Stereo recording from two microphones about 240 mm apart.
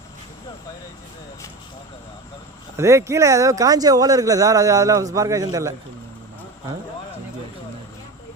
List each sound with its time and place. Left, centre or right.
2.7 s speech: centre